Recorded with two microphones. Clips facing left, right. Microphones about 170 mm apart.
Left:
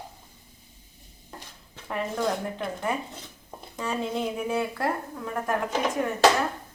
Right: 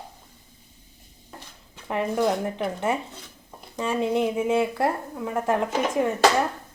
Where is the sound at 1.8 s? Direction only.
20° right (ahead or behind).